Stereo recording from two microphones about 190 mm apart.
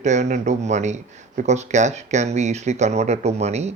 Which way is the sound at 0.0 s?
40° right (ahead or behind).